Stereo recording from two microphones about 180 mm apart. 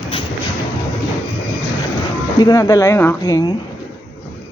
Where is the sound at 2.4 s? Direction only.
20° left (ahead or behind).